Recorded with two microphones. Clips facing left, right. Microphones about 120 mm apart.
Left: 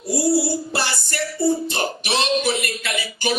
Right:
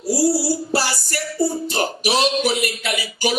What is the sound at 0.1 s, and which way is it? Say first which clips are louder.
Music: right 1 dB; 25° left (ahead or behind).